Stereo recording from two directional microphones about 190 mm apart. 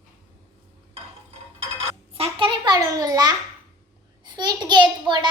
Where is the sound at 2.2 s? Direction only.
25° right (ahead or behind).